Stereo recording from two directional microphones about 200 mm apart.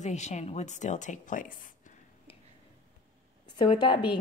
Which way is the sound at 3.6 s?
25° left (ahead or behind).